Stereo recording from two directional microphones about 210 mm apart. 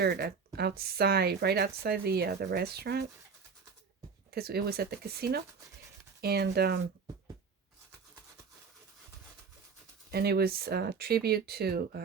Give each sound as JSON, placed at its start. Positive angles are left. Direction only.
{"t": 0.0, "sound": "a woman's voice", "side_deg": -50}
{"t": 4.3, "sound": "a woman's voice", "side_deg": -50}
{"t": 10.1, "sound": "a woman's voice", "side_deg": -50}